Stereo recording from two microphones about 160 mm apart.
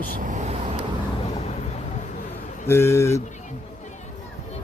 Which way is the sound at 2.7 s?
15° left (ahead or behind).